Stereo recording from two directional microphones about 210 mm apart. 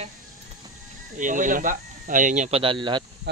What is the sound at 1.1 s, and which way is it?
Speech, 40° right (ahead or behind).